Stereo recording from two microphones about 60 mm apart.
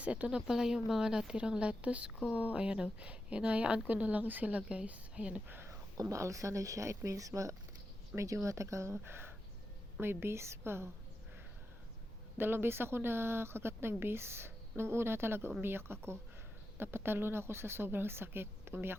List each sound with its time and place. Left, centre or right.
0.0 s speech: right
0.3 s speech: centre
6.0 s a woman's voice: right
12.4 s speech: right